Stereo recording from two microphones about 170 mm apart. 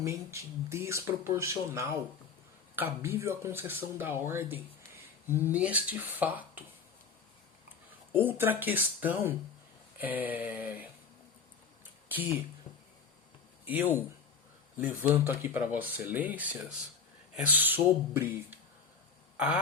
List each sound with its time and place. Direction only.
0.0 s speech: 15° right (ahead or behind)
8.1 s speech: 10° right (ahead or behind)
14.8 s speech: 10° right (ahead or behind)